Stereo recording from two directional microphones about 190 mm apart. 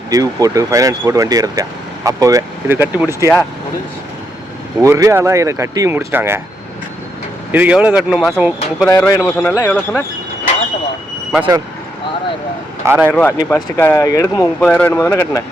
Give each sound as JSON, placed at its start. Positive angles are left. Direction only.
{"t": 0.1, "sound": "speech", "side_deg": -20}
{"t": 4.8, "sound": "speech", "side_deg": -15}
{"t": 7.5, "sound": "speech", "side_deg": -10}
{"t": 8.9, "sound": "speech", "side_deg": 15}
{"t": 12.8, "sound": "speech", "side_deg": -15}
{"t": 13.1, "sound": "speech", "side_deg": 10}